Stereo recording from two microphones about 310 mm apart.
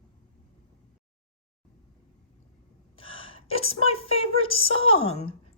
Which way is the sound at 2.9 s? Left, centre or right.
Centre.